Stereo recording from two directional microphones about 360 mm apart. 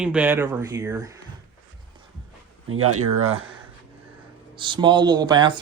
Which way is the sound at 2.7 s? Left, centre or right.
Right.